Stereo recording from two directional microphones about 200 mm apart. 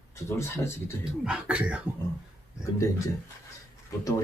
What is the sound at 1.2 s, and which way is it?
Speech, 5° right (ahead or behind).